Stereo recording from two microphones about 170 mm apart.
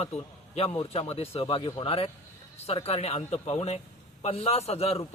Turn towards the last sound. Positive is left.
turn(degrees=35)  # may be behind; listen again after turning